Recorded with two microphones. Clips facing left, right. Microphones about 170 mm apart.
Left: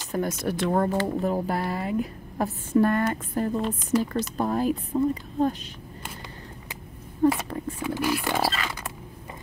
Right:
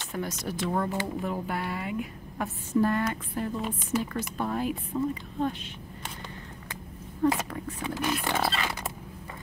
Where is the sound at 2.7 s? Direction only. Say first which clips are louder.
Left 3 dB; 55° left (ahead or behind); by 5.8 s 40° left (ahead or behind).